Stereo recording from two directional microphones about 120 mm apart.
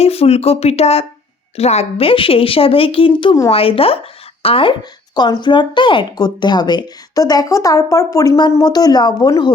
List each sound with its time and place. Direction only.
0.0 s a woman's voice: 55° left (ahead or behind); by 9.5 s 35° left (ahead or behind)